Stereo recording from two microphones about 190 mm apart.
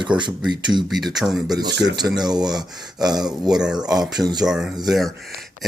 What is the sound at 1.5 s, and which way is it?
Speech, 20° right (ahead or behind).